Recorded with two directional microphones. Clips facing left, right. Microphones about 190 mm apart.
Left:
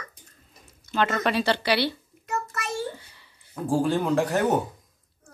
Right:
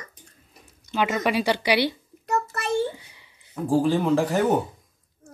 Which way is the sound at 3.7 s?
5° right (ahead or behind).